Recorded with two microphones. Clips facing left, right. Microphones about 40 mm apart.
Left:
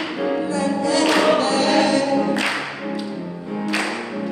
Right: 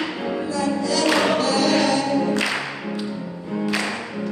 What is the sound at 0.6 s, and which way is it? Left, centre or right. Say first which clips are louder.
Music: left 1 dB; left.